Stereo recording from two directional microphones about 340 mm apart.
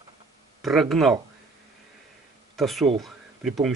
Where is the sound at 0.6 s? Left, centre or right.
Centre.